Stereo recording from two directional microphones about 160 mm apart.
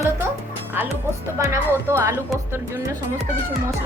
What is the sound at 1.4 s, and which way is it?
Speech, 15° right (ahead or behind).